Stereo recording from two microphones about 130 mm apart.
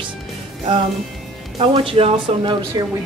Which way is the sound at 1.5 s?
45° right (ahead or behind).